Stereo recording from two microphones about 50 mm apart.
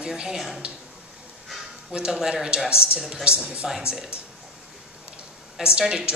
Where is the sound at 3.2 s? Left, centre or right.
Right.